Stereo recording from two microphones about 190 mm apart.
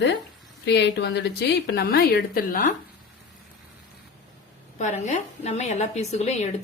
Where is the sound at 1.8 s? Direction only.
55° left (ahead or behind).